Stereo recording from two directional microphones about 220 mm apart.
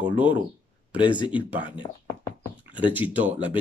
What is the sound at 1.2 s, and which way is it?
Speech, 20° left (ahead or behind).